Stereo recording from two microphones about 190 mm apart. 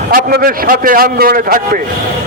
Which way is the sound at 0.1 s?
50° right (ahead or behind).